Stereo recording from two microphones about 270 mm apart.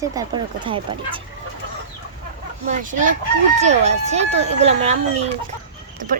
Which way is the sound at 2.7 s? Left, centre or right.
Right.